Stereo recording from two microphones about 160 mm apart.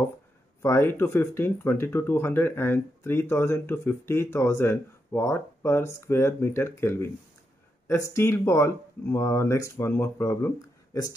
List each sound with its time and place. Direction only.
0.6 s speech: 15° left (ahead or behind)